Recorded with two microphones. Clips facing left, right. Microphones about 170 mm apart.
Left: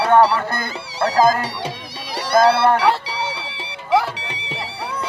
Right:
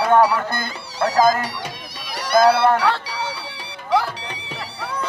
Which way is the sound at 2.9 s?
25° left (ahead or behind).